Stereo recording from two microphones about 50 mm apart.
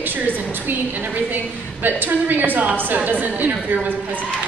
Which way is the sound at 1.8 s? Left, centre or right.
Right.